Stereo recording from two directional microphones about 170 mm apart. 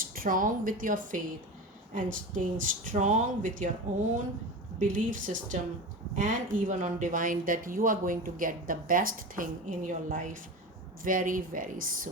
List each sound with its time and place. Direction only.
0.0 s a woman's voice: 55° right (ahead or behind)
4.8 s speech: 50° right (ahead or behind)